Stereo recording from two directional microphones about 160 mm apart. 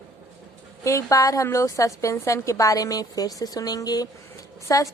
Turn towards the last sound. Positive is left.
turn(degrees=20)  # may be behind; listen again after turning